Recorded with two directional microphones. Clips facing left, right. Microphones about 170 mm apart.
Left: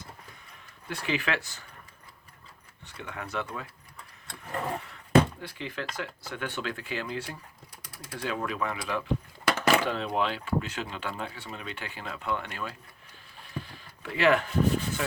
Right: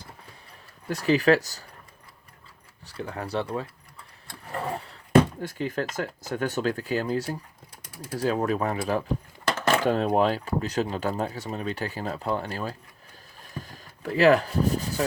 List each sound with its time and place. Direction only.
0.9 s speech: 40° right (ahead or behind)
2.8 s speech: 35° right (ahead or behind)
4.3 s vehicle: centre (ahead or behind)
5.4 s speech: 45° right (ahead or behind)
13.4 s a sound: 45° right (ahead or behind)